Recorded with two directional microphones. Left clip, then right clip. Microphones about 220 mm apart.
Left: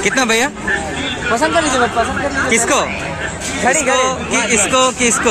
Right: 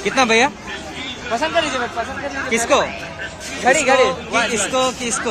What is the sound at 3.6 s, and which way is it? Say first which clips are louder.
Speech: even; 35° right (ahead or behind).